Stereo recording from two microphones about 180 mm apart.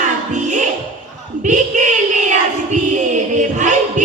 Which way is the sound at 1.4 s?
45° right (ahead or behind).